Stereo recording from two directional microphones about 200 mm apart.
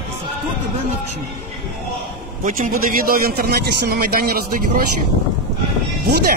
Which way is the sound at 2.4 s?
45° right (ahead or behind).